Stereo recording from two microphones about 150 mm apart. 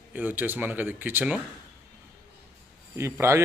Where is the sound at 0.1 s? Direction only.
10° right (ahead or behind).